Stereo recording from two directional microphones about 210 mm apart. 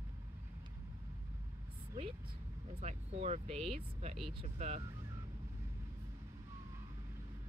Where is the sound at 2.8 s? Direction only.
30° right (ahead or behind).